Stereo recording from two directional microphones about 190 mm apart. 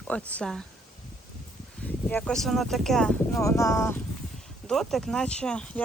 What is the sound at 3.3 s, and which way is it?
Speech, 15° left (ahead or behind).